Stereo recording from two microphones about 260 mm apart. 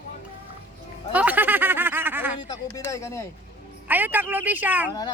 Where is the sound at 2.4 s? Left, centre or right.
Centre.